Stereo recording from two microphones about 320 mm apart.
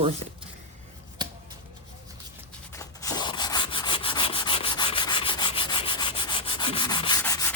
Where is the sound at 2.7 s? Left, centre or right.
Centre.